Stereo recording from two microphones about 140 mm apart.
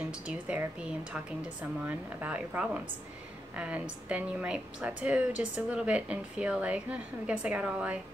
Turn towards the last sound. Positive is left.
turn(degrees=-10)  # may be behind; listen again after turning